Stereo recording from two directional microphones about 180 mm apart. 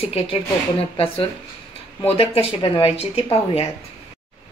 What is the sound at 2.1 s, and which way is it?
A woman's voice, 35° left (ahead or behind).